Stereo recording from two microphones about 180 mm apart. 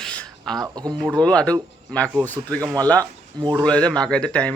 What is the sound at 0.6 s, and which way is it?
Speech, 20° right (ahead or behind).